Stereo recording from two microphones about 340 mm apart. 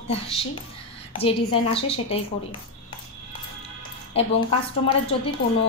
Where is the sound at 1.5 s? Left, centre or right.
Centre.